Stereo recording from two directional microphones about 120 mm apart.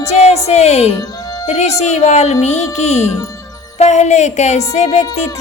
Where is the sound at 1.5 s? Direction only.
70° left (ahead or behind).